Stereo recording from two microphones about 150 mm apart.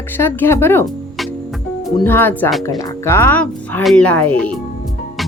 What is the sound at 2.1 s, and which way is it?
Speech, 15° left (ahead or behind).